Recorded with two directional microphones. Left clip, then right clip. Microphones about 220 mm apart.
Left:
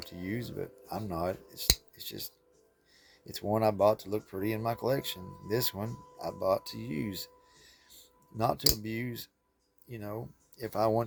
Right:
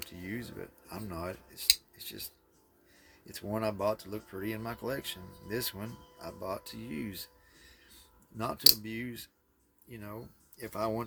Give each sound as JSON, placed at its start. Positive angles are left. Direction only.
{"t": 0.1, "sound": "speech", "side_deg": 20}